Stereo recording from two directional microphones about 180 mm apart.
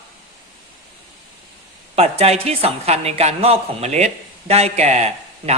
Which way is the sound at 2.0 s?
35° right (ahead or behind).